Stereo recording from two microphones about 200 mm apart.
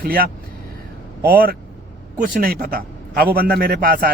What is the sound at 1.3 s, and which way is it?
A man's voice, 45° right (ahead or behind).